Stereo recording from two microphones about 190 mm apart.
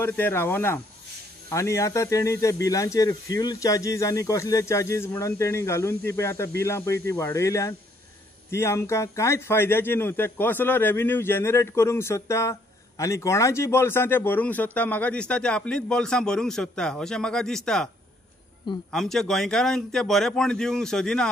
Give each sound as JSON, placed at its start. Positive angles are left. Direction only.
{"t": 0.0, "sound": "a man's voice", "side_deg": 10}
{"t": 18.9, "sound": "speech", "side_deg": 0}